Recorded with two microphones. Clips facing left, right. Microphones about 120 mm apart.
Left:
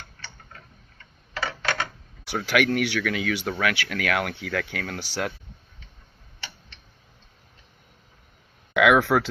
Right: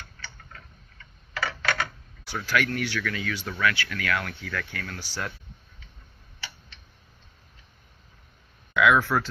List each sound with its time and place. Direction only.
1.4 s a sound: 25° left (ahead or behind)
2.5 s speech: 75° left (ahead or behind)
3.6 s speech: 90° left
8.7 s speech: 90° left